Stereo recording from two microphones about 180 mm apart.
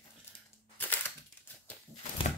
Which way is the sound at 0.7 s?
10° left (ahead or behind).